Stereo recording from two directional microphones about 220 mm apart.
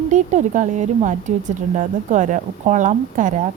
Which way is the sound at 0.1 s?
35° right (ahead or behind).